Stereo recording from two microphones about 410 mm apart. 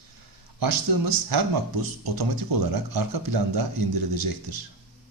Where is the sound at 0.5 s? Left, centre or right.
Right.